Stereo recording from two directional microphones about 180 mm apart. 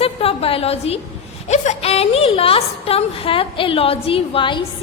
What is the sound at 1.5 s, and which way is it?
A woman's voice, 40° left (ahead or behind).